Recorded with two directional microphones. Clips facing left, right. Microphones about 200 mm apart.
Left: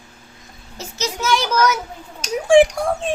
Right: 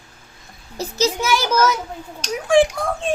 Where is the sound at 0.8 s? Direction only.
35° right (ahead or behind).